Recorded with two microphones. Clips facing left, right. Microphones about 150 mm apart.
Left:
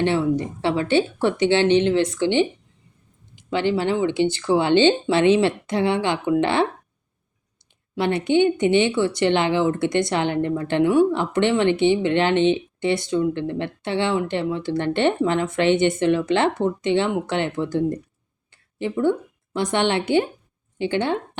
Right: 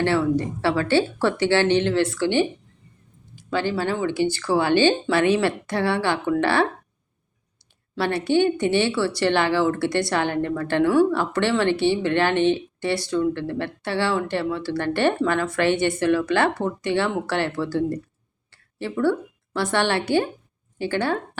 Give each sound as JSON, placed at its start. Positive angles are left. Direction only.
{"t": 0.0, "sound": "speech", "side_deg": 20}
{"t": 7.9, "sound": "speech", "side_deg": 20}
{"t": 18.5, "sound": "a sound", "side_deg": 20}
{"t": 19.5, "sound": "speech", "side_deg": 20}